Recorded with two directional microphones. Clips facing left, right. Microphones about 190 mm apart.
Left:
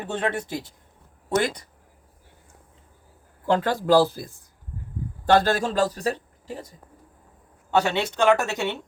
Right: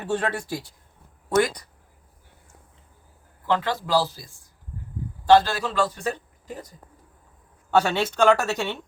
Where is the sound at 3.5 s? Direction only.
45° left (ahead or behind); by 8.7 s 20° left (ahead or behind).